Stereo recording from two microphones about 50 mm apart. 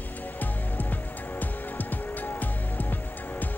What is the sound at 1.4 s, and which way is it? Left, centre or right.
Music, left.